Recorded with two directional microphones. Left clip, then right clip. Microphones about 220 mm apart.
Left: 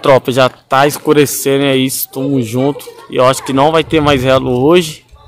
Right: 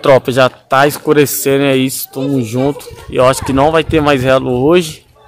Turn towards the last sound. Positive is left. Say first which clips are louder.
# left 1 dB
turn(degrees=5)  # may be behind; listen again after turning